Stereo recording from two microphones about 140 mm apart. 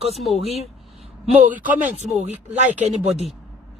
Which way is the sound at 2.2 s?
55° right (ahead or behind).